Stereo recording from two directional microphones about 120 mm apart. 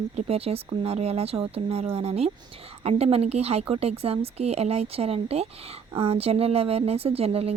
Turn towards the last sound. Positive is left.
turn(degrees=-55)  # may be behind; listen again after turning